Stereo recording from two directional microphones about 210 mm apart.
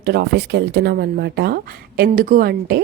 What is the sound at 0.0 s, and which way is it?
A woman's voice, 50° right (ahead or behind).